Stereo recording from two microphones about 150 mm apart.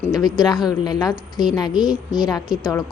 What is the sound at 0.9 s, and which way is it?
Speech, 25° left (ahead or behind).